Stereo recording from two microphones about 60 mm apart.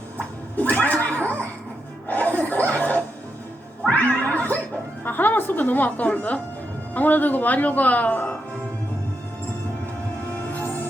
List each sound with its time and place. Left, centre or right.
0.5 s neigh: left
2.0 s music: left
2.5 s a sound: left
3.8 s cat: left
5.0 s music: left
6.9 s speech: left